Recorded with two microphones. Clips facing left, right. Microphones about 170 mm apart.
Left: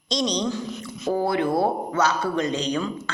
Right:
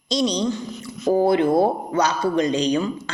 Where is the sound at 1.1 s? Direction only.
20° right (ahead or behind).